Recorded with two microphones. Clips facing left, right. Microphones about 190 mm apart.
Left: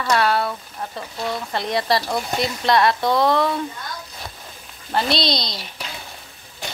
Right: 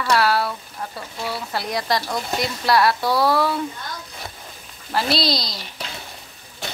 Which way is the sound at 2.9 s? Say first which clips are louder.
Left 1 dB; 20° left (ahead or behind).